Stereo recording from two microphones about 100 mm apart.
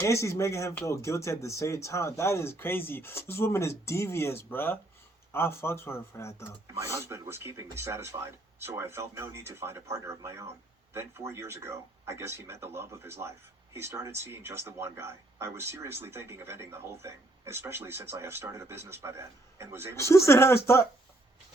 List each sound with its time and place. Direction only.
0.0 s speech: 30° left (ahead or behind)
6.9 s speech: 25° right (ahead or behind)
20.0 s speech: 30° left (ahead or behind)